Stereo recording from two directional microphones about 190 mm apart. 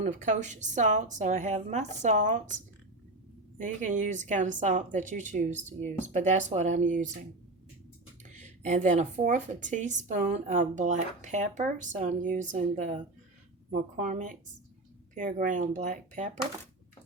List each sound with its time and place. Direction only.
0.0 s speech: 40° right (ahead or behind)
3.6 s speech: 40° right (ahead or behind)
8.2 s speech: 40° right (ahead or behind)